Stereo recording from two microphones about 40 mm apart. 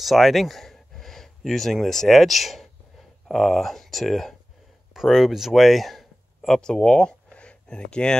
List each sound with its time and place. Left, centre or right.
0.0 s speech: centre; by 8.2 s left